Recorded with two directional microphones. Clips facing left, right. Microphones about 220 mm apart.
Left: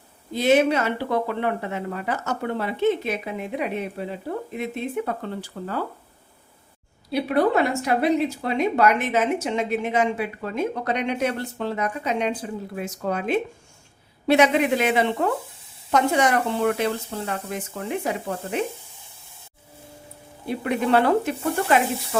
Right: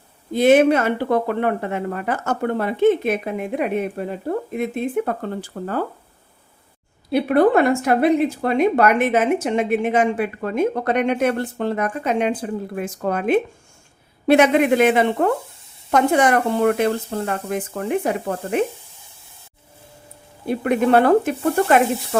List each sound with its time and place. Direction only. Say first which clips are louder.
0.3 s a woman's voice: right 5 dB; 50° right (ahead or behind)
7.1 s a woman's voice: right 5 dB; 55° right (ahead or behind)
20.5 s a woman's voice: right 5 dB; 55° right (ahead or behind)